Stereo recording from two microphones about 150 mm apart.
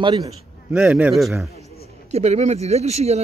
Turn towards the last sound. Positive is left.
turn(degrees=-45)  # may be behind; listen again after turning